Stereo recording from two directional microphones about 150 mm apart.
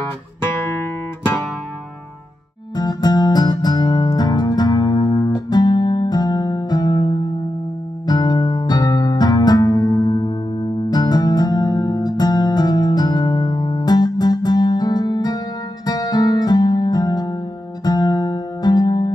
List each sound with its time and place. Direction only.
0.7 s guitar: 15° left (ahead or behind)
2.7 s music: 25° left (ahead or behind)